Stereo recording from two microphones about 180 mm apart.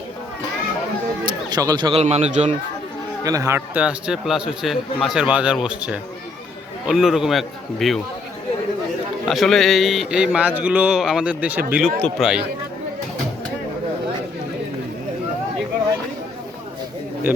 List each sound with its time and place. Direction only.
1.2 s speech: 25° right (ahead or behind); by 2.6 s 40° right (ahead or behind)
3.2 s a man's voice: 20° right (ahead or behind); by 8.0 s centre (ahead or behind)
9.2 s a man's voice: centre (ahead or behind)
17.3 s speech: 10° right (ahead or behind)